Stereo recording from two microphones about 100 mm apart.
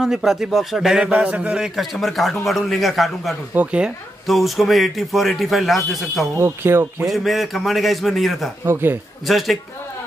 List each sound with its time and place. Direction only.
0.0 s a man's voice: 5° right (ahead or behind)
6.3 s speech: 25° right (ahead or behind)
7.1 s a man's voice: centre (ahead or behind)